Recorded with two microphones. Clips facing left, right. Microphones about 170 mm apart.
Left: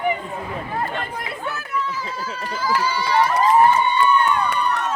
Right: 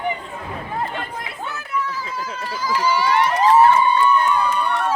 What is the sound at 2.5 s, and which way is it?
Speech, 15° right (ahead or behind).